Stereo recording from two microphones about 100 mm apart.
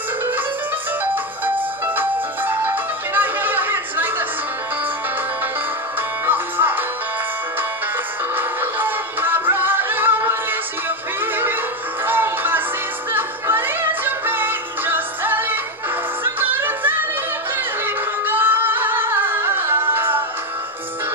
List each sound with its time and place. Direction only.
2.0 s music: 20° right (ahead or behind)
6.2 s music: 20° right (ahead or behind)
8.4 s music: 20° right (ahead or behind)
17.8 s singing: 20° right (ahead or behind)